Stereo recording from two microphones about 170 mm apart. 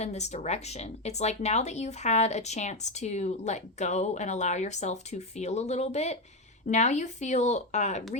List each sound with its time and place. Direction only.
0.0 s speech: 40° left (ahead or behind)